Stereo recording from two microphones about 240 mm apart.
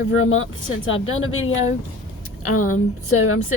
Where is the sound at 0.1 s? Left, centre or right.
Left.